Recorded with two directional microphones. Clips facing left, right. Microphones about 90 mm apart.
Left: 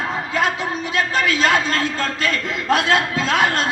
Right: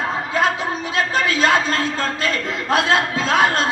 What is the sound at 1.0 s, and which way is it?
A man's voice, 25° right (ahead or behind).